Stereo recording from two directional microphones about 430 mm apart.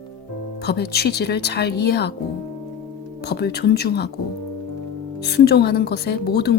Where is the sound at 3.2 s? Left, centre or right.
Left.